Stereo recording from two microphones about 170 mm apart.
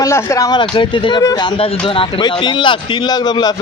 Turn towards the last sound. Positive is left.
turn(degrees=25)  # may be behind; listen again after turning